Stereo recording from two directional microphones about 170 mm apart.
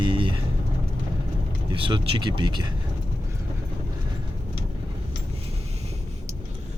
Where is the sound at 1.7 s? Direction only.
30° right (ahead or behind).